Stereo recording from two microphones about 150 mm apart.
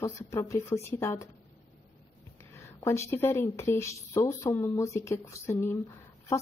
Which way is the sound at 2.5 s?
20° left (ahead or behind).